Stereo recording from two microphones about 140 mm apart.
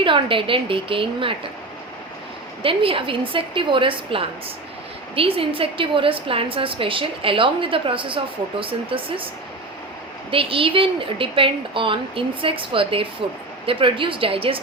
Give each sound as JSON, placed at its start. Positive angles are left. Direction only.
{"t": 0.0, "sound": "a woman's voice", "side_deg": -35}
{"t": 2.6, "sound": "a woman's voice", "side_deg": -40}
{"t": 10.3, "sound": "a woman's voice", "side_deg": -40}